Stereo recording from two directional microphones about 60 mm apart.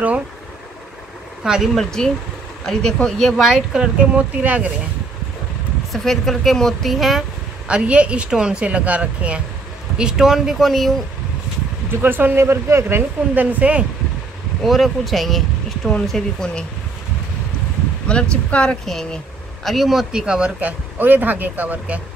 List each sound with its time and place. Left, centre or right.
1.4 s speech: centre
1.8 s speech: centre
3.5 s speech: centre
5.9 s speech: centre
7.6 s speech: centre
9.9 s speech: centre
11.9 s speech: right
12.4 s speech: right
12.8 s speech: right
14.6 s speech: centre
18.0 s speech: centre
18.9 s speech: centre
21.0 s speech: right